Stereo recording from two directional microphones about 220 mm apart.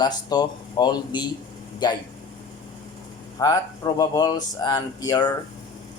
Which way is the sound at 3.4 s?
15° left (ahead or behind).